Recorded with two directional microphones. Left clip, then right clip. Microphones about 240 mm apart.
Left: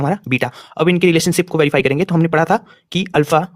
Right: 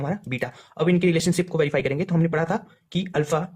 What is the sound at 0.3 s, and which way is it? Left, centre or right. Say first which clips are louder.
Speech: left 10 dB; left.